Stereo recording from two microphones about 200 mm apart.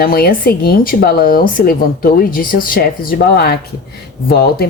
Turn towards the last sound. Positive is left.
turn(degrees=50)  # may be behind; listen again after turning